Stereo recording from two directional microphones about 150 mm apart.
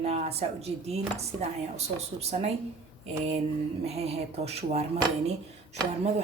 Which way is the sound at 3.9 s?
45° right (ahead or behind).